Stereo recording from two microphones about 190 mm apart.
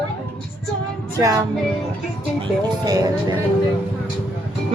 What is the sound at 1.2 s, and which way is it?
A woman's voice, 20° right (ahead or behind).